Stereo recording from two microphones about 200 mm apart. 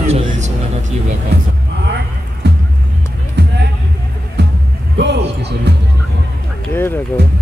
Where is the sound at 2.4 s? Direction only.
60° right (ahead or behind).